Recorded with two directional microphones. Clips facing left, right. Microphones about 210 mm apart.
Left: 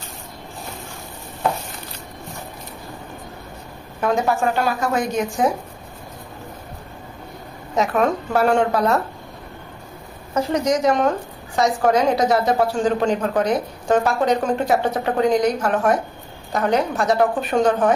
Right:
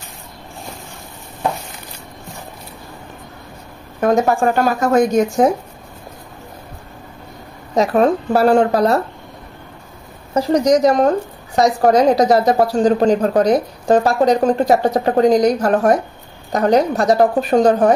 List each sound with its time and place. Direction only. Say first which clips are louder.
4.0 s a woman's voice: right 5 dB; 45° right (ahead or behind)
7.7 s a woman's voice: right 5 dB; 35° right (ahead or behind)
10.3 s a woman's voice: right 6 dB; 35° right (ahead or behind)